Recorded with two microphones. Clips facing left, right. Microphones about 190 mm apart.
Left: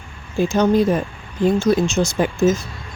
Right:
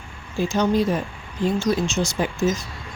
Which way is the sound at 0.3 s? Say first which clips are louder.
Left 4 dB; 50° left (ahead or behind).